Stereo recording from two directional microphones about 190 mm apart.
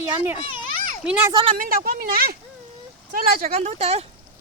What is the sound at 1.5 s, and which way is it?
Speech, 45° right (ahead or behind).